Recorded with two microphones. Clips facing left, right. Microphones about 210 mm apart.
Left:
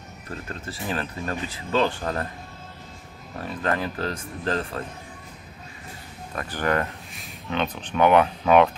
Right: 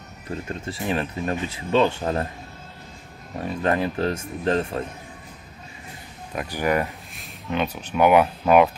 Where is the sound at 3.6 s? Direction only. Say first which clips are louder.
Right 4 dB; 20° right (ahead or behind).